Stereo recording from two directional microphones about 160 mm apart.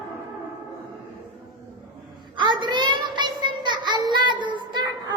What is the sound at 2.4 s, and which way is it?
Child singing, 30° right (ahead or behind).